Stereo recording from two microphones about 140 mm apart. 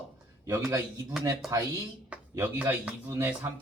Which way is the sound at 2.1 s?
10° right (ahead or behind).